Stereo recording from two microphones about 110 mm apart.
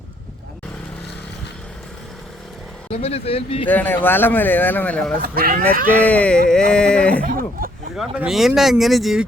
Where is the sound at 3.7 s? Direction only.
15° left (ahead or behind).